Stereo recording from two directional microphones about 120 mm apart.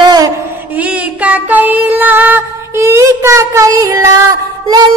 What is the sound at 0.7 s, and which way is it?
Music, 10° right (ahead or behind).